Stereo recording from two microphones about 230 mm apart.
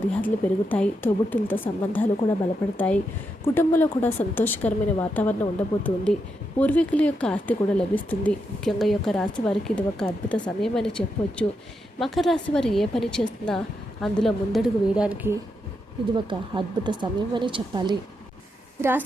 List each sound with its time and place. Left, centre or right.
0.1 s a woman's voice: centre
16.1 s speech: centre
18.8 s a woman's voice: centre